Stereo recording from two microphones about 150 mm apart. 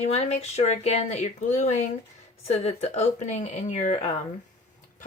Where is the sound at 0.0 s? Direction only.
45° left (ahead or behind).